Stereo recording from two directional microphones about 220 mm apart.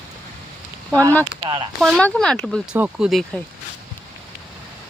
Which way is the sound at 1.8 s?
5° left (ahead or behind).